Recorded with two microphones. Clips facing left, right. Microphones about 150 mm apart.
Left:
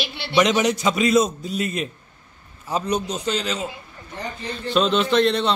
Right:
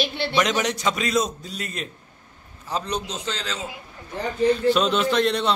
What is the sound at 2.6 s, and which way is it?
A man's voice, 5° left (ahead or behind).